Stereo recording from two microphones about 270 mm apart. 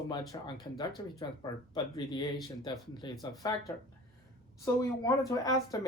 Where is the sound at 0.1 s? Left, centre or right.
Centre.